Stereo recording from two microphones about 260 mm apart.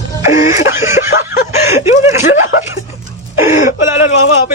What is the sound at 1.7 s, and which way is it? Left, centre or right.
Speech, centre.